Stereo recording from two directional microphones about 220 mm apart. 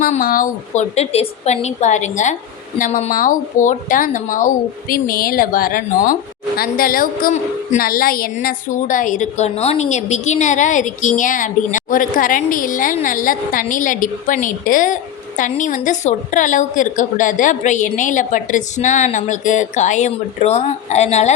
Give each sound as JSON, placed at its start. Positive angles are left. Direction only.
{"t": 0.0, "sound": "a woman's voice", "side_deg": 40}